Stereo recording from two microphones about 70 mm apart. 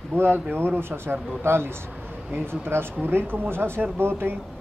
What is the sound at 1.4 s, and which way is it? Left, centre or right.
Speech, right.